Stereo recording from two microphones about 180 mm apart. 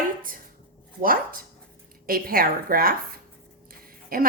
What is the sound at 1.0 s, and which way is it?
A woman's voice, 50° right (ahead or behind).